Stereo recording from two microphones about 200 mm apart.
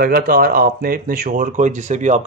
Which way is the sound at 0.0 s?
50° right (ahead or behind).